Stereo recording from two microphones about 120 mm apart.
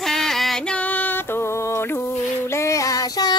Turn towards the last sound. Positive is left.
turn(degrees=35)  # may be behind; listen again after turning